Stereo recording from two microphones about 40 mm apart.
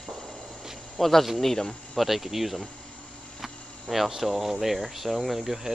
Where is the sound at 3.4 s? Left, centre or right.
Centre.